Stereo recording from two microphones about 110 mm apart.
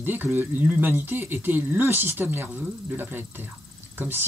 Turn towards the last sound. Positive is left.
turn(degrees=-20)  # may be behind; listen again after turning